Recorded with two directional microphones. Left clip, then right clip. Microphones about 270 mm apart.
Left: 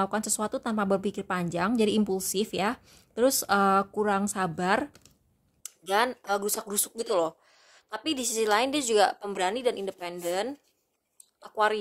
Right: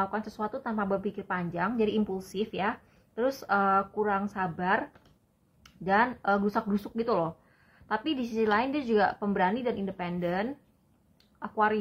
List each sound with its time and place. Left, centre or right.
0.0 s speech: left
11.5 s speech: left